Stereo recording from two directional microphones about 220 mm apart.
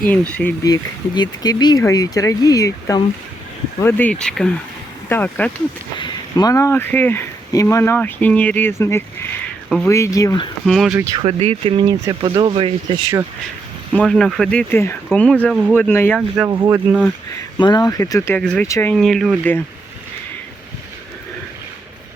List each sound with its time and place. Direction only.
0.0 s speech: 5° left (ahead or behind)
0.6 s speech: 20° left (ahead or behind); by 9.9 s centre (ahead or behind)
9.9 s speech: 15° left (ahead or behind)
10.7 s speech: centre (ahead or behind)
11.2 s speech: 25° right (ahead or behind)
13.9 s speech: 5° left (ahead or behind)
16.5 s speech: 15° right (ahead or behind)
17.6 s speech: 20° left (ahead or behind)